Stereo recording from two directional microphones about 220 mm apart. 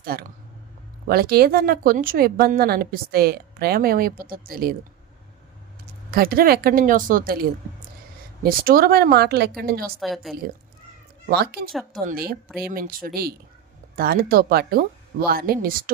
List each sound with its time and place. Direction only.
0.0 s a woman's voice: 45° right (ahead or behind)
6.1 s a woman's voice: 45° right (ahead or behind)
8.4 s a woman's voice: 40° right (ahead or behind)
10.0 s a woman's voice: centre (ahead or behind)
11.3 s a woman's voice: 45° right (ahead or behind)